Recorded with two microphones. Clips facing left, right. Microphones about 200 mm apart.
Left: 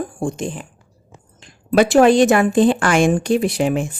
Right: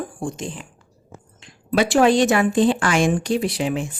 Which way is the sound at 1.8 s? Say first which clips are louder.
Left 4 dB; 50° left (ahead or behind).